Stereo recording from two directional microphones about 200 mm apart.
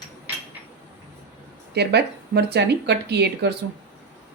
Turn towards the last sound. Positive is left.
turn(degrees=-55)  # may be behind; listen again after turning